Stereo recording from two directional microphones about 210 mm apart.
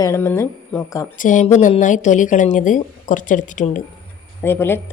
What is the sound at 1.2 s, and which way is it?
Speech, 35° left (ahead or behind).